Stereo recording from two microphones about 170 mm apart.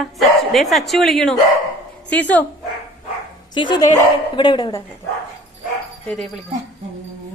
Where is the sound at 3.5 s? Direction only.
25° left (ahead or behind).